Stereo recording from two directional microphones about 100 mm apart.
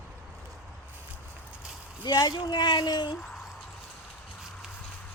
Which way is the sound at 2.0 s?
45° left (ahead or behind).